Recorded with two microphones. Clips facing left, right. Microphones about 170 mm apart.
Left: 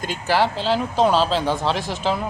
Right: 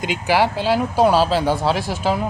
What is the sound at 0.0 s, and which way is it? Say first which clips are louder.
Speech: right 2 dB; 15° right (ahead or behind).